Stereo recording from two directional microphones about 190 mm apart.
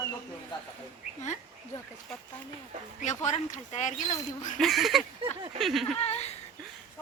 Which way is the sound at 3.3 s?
40° left (ahead or behind).